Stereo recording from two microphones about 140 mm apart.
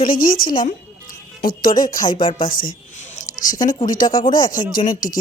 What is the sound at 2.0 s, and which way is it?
Speech, 35° left (ahead or behind).